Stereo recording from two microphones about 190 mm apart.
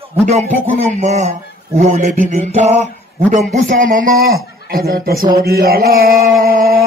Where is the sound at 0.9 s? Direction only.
35° right (ahead or behind).